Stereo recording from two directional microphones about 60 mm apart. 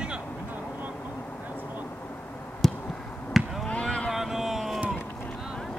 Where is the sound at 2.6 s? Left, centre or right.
Centre.